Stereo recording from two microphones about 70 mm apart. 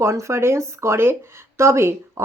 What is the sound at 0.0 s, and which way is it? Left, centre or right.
Speech, right.